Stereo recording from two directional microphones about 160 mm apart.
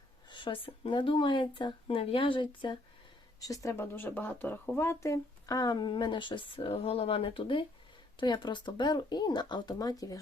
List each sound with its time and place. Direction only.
0.3 s speech: 30° left (ahead or behind)
3.4 s speech: 20° left (ahead or behind)